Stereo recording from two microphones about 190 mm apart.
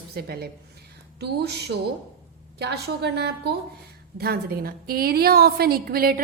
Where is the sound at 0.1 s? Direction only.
55° right (ahead or behind).